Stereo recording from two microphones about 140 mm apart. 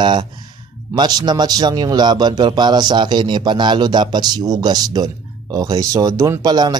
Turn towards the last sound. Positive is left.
turn(degrees=-30)  # may be behind; listen again after turning